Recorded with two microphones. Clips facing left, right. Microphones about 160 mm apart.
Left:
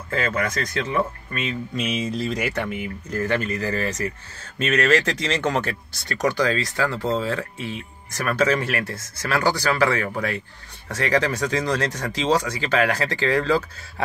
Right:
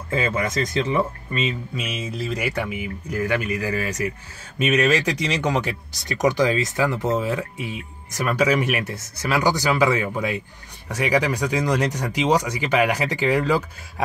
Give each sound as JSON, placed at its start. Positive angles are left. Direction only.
{"t": 0.1, "sound": "speech", "side_deg": -20}
{"t": 1.8, "sound": "speech", "side_deg": -5}